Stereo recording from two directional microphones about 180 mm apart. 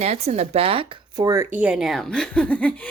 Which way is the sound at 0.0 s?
35° right (ahead or behind).